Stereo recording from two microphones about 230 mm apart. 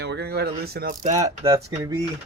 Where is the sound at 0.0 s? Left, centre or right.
Right.